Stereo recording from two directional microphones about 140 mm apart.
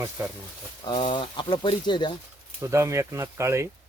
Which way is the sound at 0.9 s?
35° left (ahead or behind).